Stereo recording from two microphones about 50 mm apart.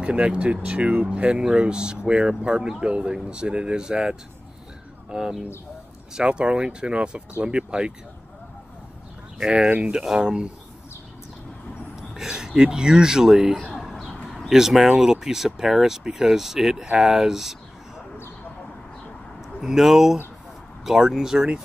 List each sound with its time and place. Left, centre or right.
0.0 s speech: right
9.7 s speech: right
9.9 s speech: centre
12.3 s speech: centre
13.9 s a sound: centre
14.5 s speech: centre
19.6 s speech: centre